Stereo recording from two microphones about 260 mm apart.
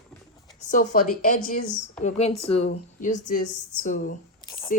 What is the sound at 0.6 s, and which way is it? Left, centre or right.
Speech, left.